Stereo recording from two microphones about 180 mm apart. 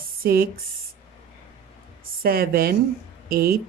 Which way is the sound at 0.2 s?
55° right (ahead or behind).